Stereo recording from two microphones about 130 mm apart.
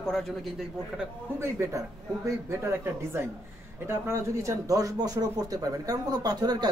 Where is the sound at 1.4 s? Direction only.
20° right (ahead or behind).